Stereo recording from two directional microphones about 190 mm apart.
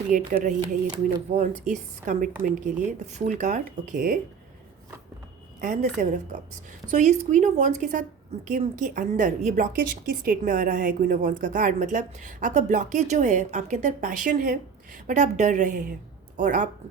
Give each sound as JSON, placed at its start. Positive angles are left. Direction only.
{"t": 0.1, "sound": "a woman's voice", "side_deg": -40}
{"t": 5.5, "sound": "a woman's voice", "side_deg": -40}